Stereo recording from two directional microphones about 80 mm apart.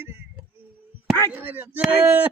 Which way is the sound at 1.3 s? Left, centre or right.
Right.